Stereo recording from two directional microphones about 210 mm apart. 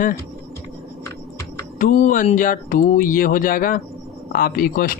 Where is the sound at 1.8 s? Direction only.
40° left (ahead or behind).